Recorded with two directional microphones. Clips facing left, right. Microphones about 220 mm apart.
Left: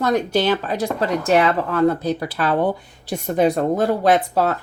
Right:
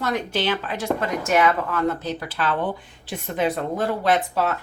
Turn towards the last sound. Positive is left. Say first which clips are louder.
# left 4 dB
turn(degrees=40)  # may be behind; listen again after turning